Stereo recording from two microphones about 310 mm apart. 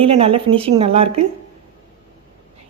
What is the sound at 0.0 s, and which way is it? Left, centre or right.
A woman's voice, centre.